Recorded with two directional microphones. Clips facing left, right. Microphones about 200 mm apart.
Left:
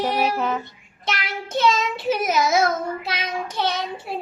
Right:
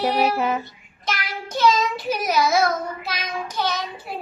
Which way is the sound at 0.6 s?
25° left (ahead or behind).